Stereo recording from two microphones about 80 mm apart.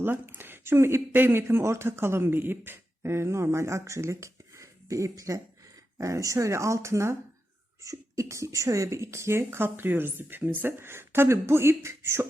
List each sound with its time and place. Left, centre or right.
0.0 s speech: right